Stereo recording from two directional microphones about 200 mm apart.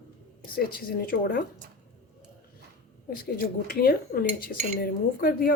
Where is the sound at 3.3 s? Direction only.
50° left (ahead or behind).